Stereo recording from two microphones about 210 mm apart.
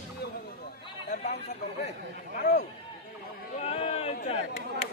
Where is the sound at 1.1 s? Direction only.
35° left (ahead or behind).